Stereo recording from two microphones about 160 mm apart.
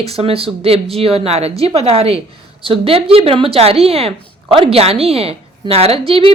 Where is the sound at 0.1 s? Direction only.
35° right (ahead or behind).